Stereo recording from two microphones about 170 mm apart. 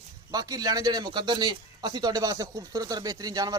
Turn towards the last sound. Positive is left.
turn(degrees=-20)  # may be behind; listen again after turning